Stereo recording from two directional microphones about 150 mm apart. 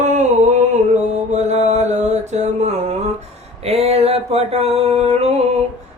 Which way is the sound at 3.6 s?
45° right (ahead or behind).